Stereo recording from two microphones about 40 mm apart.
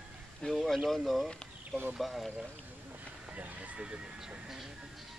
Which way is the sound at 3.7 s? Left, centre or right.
Right.